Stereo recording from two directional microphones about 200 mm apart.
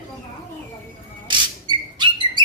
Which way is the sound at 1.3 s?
25° right (ahead or behind).